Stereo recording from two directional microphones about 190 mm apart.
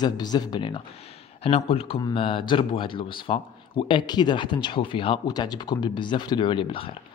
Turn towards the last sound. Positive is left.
turn(degrees=30)  # may be behind; listen again after turning